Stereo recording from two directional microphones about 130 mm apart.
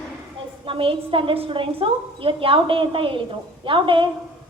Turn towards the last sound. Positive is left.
turn(degrees=-40)  # may be behind; listen again after turning